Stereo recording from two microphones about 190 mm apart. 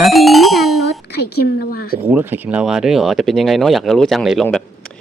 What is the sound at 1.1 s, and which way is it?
Speech, 55° left (ahead or behind).